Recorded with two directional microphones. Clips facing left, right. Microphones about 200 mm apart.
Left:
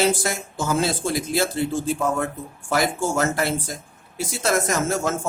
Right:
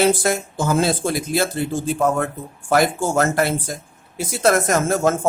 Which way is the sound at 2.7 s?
55° right (ahead or behind).